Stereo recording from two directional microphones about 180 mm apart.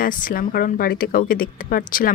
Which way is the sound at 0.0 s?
50° left (ahead or behind).